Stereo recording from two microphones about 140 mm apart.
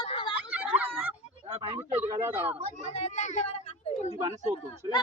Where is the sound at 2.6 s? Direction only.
50° right (ahead or behind).